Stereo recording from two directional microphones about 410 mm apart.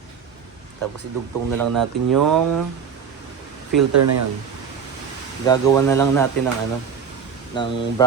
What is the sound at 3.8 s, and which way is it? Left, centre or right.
Speech, right.